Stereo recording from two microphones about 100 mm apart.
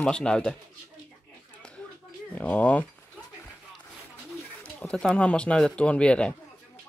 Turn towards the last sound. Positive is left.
turn(degrees=10)  # may be behind; listen again after turning